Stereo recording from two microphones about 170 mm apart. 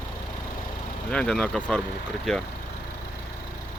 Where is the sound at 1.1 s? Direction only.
5° left (ahead or behind).